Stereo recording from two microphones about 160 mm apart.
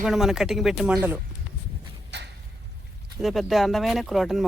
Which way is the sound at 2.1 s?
90° right.